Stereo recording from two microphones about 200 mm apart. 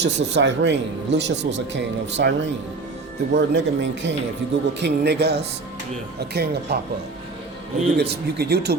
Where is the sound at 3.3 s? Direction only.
60° right (ahead or behind).